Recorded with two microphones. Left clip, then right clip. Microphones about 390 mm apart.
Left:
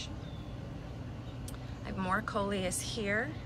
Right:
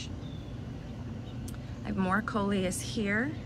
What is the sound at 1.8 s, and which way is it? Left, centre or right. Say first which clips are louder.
A woman's voice: right 3 dB; centre.